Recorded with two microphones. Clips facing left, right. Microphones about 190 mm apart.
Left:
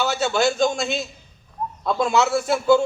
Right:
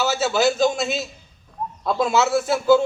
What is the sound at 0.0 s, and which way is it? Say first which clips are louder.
A man's voice: right 1 dB; 5° right (ahead or behind).